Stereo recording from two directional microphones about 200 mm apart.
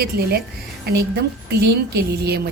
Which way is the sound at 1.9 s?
55° right (ahead or behind).